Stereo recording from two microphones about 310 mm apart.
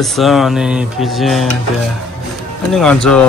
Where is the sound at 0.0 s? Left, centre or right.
Centre.